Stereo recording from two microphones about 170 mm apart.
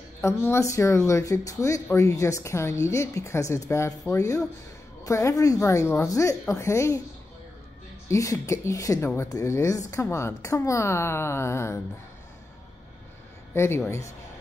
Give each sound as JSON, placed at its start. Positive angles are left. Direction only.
{"t": 0.2, "sound": "speech", "side_deg": 15}
{"t": 8.1, "sound": "speech", "side_deg": 15}
{"t": 13.6, "sound": "speech", "side_deg": 15}